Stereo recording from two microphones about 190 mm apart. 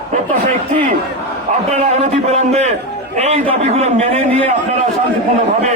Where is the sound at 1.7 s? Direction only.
35° right (ahead or behind).